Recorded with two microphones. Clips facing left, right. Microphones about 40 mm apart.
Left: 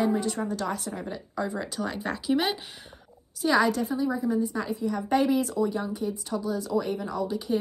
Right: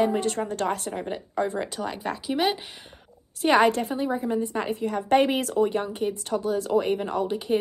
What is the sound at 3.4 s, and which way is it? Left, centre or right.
Speech, right.